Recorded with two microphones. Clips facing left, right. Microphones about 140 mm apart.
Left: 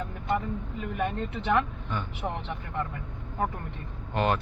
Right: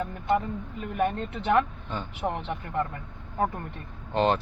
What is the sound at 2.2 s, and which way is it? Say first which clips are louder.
Speech: right 4 dB; 25° right (ahead or behind).